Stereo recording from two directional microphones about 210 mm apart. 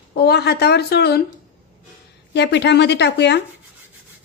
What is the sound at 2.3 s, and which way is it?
A woman's voice, 55° left (ahead or behind).